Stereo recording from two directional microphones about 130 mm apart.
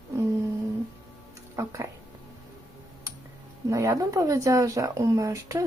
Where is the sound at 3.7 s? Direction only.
25° right (ahead or behind).